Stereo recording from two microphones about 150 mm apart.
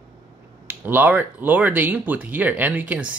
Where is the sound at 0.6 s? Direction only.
10° right (ahead or behind).